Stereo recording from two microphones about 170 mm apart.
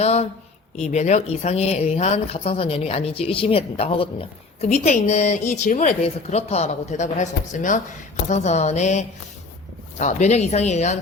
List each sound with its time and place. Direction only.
0.0 s speech: 40° left (ahead or behind)